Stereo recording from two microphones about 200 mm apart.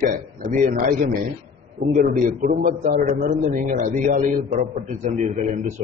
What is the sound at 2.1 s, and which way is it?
A man's voice, 45° right (ahead or behind).